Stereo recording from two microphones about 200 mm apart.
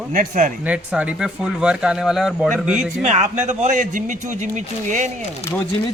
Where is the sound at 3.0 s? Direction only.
35° right (ahead or behind).